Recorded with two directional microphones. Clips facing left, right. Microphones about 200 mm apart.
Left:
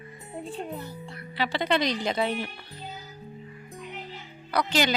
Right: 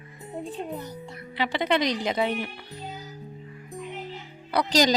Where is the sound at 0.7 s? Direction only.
20° right (ahead or behind).